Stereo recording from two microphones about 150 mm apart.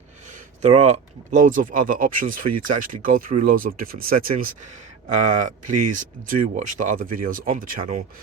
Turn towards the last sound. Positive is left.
turn(degrees=-65)  # may be behind; listen again after turning